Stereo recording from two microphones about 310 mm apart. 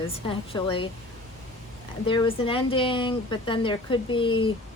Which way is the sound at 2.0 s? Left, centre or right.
Centre.